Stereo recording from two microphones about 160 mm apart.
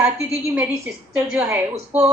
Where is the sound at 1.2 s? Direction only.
5° right (ahead or behind).